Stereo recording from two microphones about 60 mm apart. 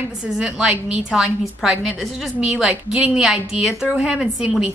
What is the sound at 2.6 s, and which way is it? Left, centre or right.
A woman's voice, centre.